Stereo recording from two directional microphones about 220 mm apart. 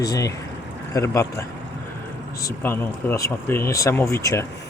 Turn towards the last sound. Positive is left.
turn(degrees=10)  # may be behind; listen again after turning